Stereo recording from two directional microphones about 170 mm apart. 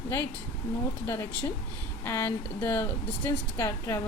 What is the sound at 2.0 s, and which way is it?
Speech, 15° left (ahead or behind).